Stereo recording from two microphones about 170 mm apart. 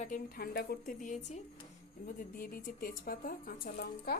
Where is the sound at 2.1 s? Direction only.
55° left (ahead or behind).